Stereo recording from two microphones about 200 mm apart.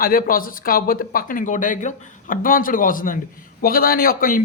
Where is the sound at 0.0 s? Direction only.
45° left (ahead or behind).